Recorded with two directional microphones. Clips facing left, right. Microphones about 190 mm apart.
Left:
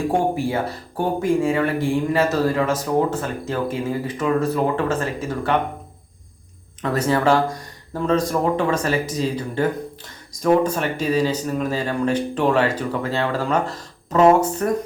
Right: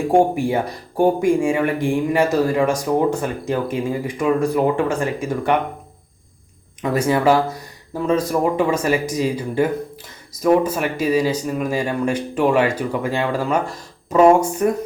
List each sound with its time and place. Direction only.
0.3 s speech: 15° right (ahead or behind)
6.8 s speech: 10° right (ahead or behind)